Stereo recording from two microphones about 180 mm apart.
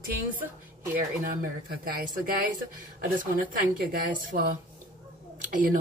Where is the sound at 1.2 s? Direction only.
55° right (ahead or behind).